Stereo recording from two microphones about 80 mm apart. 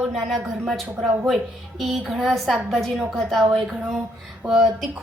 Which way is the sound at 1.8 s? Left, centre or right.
Centre.